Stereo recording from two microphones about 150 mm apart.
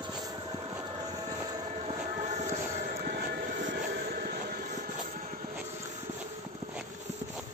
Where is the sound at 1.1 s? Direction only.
25° right (ahead or behind).